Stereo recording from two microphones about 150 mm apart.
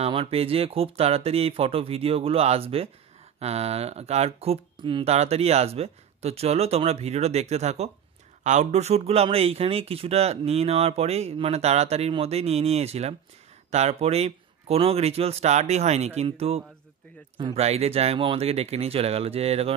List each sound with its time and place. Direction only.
0.0 s speech: 40° right (ahead or behind)
5.0 s speech: 45° right (ahead or behind)